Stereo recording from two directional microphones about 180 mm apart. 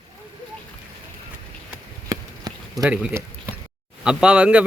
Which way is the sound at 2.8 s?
5° right (ahead or behind).